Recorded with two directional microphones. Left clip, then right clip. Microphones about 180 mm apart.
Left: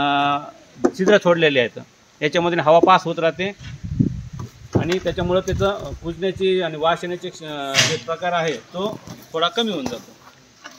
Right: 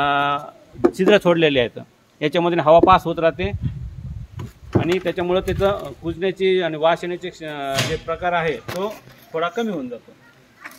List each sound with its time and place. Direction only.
0.0 s a sound: 20° right (ahead or behind)
0.8 s speech: 35° right (ahead or behind)
4.7 s speech: 25° right (ahead or behind)